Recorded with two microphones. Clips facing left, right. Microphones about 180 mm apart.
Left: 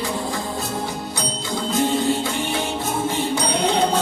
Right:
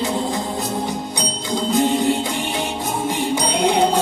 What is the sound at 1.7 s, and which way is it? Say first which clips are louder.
Music: right 2 dB; 15° right (ahead or behind).